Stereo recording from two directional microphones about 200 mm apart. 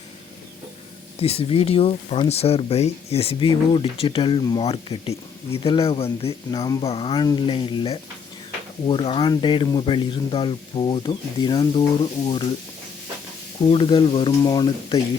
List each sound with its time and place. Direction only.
1.2 s speech: 30° left (ahead or behind)
6.6 s speech: 20° left (ahead or behind)
13.6 s speech: 25° left (ahead or behind)